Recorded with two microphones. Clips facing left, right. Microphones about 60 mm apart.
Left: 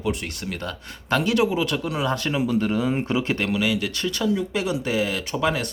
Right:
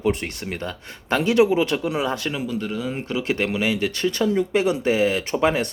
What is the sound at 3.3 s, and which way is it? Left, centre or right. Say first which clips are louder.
Speech: right 1 dB; right.